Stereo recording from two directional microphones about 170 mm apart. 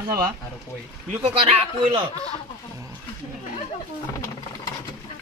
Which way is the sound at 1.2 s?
35° right (ahead or behind).